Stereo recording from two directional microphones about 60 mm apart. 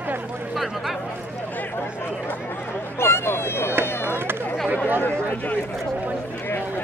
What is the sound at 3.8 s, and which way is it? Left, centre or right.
Run, left.